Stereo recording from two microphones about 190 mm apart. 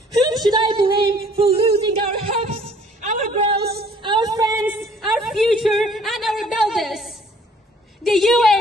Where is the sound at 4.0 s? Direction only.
25° right (ahead or behind).